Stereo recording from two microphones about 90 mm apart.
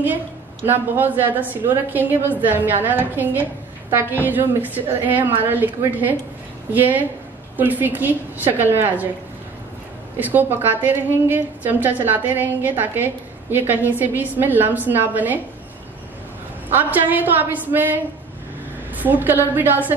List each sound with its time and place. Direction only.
0.7 s a woman's voice: 20° right (ahead or behind)
10.1 s a woman's voice: 20° right (ahead or behind)
16.7 s a woman's voice: 20° right (ahead or behind)